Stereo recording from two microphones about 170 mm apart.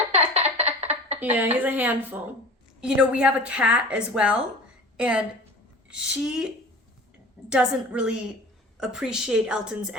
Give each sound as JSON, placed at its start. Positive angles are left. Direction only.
{"t": 0.1, "sound": "a sound", "side_deg": -40}
{"t": 1.2, "sound": "a woman's voice", "side_deg": -10}
{"t": 7.5, "sound": "a woman's voice", "side_deg": -5}